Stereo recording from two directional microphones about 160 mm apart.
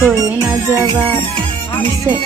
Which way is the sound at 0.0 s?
15° right (ahead or behind).